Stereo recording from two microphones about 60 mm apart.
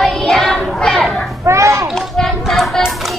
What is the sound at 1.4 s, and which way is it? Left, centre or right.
Children playing, right.